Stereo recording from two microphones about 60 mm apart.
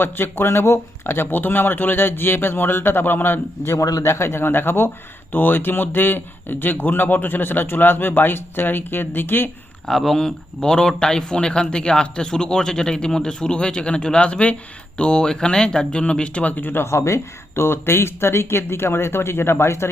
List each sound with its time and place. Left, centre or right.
0.0 s speech: left
3.8 s a man's voice: left
4.0 s speech: left
9.8 s speech: centre; by 16.8 s left
16.8 s speech: left